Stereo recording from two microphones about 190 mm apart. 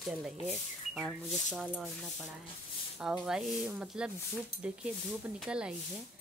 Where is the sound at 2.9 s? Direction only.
5° right (ahead or behind).